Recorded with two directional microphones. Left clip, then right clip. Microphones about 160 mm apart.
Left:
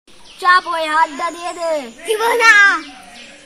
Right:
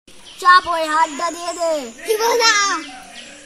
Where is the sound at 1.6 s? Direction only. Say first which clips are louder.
Even; 15° left (ahead or behind).